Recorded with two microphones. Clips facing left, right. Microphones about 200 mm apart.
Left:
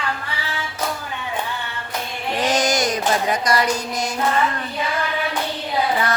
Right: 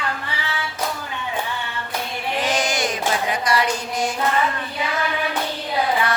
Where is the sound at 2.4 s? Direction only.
40° left (ahead or behind).